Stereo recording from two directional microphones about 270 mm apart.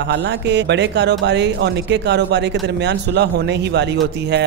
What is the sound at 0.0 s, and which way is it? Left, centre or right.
Speech, right.